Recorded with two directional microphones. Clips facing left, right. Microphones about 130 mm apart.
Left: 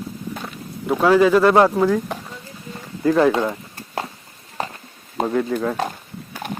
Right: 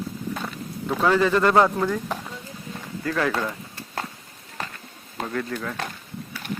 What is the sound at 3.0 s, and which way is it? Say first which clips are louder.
Speech: left 9 dB; 25° left (ahead or behind).